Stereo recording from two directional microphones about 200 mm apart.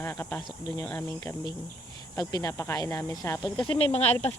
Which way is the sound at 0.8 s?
15° left (ahead or behind).